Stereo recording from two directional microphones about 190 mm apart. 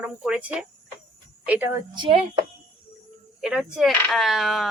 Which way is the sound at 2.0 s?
30° right (ahead or behind).